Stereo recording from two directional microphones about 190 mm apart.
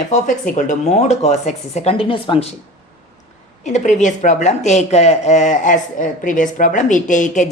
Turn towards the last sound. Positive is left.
turn(degrees=40)  # may be behind; listen again after turning